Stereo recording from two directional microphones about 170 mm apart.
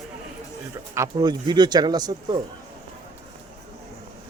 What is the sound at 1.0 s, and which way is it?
Speech, 25° right (ahead or behind).